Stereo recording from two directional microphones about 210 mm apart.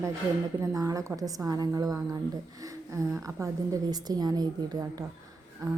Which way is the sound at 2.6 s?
15° right (ahead or behind).